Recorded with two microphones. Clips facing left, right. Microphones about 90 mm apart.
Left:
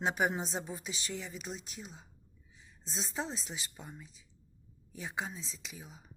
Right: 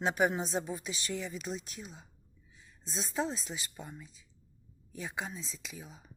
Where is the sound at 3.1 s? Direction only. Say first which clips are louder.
Right 5 dB; 25° left (ahead or behind).